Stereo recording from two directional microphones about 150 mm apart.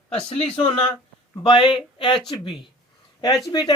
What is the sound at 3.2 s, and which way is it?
Speech, 25° left (ahead or behind).